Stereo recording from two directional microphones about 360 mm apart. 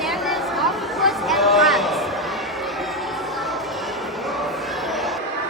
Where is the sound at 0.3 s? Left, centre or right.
Centre.